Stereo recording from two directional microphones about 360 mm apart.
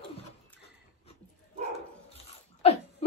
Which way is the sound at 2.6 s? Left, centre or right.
Centre.